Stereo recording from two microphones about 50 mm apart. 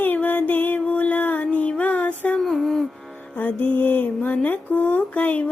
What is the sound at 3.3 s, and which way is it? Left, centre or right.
Speech, left.